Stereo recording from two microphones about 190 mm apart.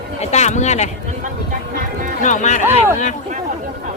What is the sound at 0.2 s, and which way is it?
Speech, 35° left (ahead or behind).